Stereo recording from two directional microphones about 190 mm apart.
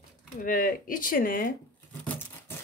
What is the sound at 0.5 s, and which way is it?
Speech, 45° left (ahead or behind).